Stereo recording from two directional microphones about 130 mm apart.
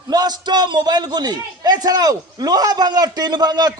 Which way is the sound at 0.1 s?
30° right (ahead or behind).